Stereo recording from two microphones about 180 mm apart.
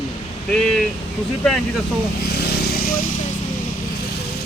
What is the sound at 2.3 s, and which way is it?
Vehicle, 65° left (ahead or behind).